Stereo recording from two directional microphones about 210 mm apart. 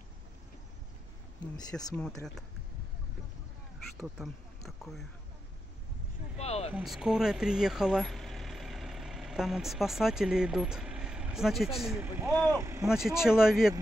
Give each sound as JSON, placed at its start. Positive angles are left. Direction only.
{"t": 1.6, "sound": "speech", "side_deg": 20}
{"t": 4.0, "sound": "speech", "side_deg": 0}
{"t": 6.3, "sound": "speech", "side_deg": 30}
{"t": 6.7, "sound": "speech", "side_deg": 0}
{"t": 12.8, "sound": "speech", "side_deg": 0}